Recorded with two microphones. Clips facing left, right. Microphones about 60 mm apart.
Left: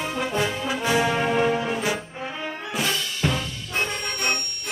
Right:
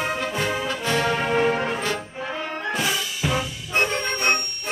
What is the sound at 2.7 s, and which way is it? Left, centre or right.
Music, centre.